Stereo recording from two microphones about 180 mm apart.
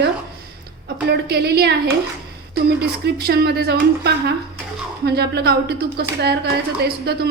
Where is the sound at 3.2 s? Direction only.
60° right (ahead or behind).